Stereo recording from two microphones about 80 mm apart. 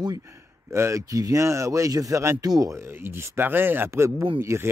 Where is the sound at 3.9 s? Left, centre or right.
Right.